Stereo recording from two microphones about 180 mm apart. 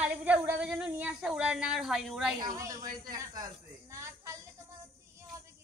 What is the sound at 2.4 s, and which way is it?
Speech, 20° right (ahead or behind).